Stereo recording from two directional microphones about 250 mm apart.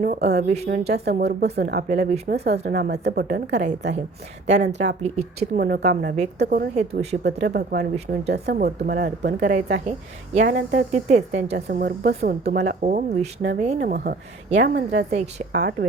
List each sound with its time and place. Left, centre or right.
0.0 s speech: right
0.4 s a woman's voice: right
0.9 s speech: right
1.9 s a woman's voice: right
2.3 s speech: right
4.4 s a woman's voice: right
7.4 s speech: right
7.9 s a woman's voice: right
8.4 s speech: right
9.5 s a woman's voice: right
10.3 s speech: right
15.5 s speech: right